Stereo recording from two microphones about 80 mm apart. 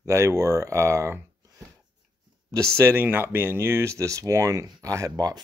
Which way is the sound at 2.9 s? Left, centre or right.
Right.